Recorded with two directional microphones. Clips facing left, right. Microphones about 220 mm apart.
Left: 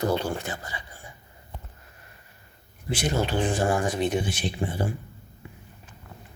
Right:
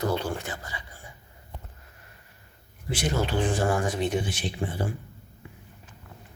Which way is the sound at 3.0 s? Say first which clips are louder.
Left 1 dB; 20° left (ahead or behind).